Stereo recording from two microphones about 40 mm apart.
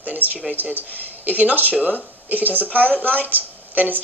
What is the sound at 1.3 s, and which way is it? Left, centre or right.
A woman's voice, right.